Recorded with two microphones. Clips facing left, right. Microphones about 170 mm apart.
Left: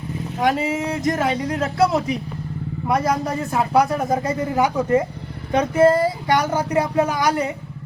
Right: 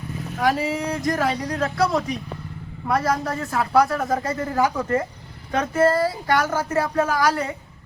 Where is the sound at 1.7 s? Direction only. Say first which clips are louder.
Left 4 dB; 25° left (ahead or behind).